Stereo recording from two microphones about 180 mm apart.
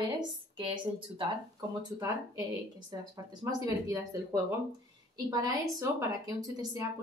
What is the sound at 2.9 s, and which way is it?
A woman's voice, 20° right (ahead or behind).